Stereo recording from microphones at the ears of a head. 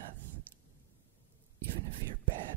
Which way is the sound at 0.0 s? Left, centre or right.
Right.